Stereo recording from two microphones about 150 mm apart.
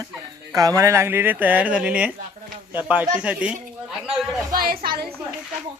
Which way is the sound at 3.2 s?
10° right (ahead or behind).